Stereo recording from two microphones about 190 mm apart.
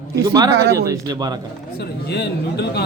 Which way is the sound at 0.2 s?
20° right (ahead or behind).